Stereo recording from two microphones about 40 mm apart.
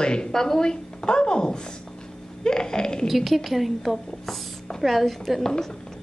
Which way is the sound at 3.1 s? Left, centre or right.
Centre.